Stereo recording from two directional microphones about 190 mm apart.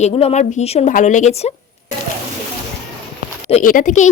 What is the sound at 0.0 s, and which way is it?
A woman's voice, 35° left (ahead or behind).